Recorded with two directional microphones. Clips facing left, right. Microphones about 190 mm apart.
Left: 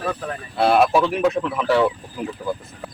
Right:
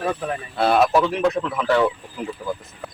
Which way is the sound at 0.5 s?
10° left (ahead or behind).